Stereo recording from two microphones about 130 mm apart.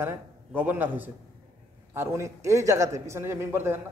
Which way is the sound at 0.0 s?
15° right (ahead or behind).